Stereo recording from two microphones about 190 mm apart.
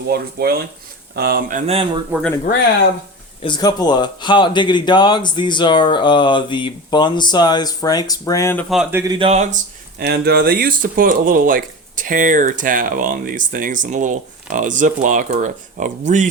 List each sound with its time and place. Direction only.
0.1 s speech: 55° right (ahead or behind); by 2.0 s 30° right (ahead or behind)
3.4 s speech: 20° left (ahead or behind)
8.7 s speech: 5° right (ahead or behind)
9.1 s speech: 30° right (ahead or behind)
10.0 s speech: 55° right (ahead or behind); by 16.3 s 40° right (ahead or behind)